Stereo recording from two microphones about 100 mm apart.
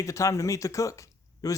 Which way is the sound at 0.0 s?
30° left (ahead or behind).